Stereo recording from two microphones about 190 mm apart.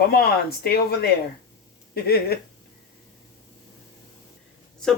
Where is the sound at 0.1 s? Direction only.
55° left (ahead or behind).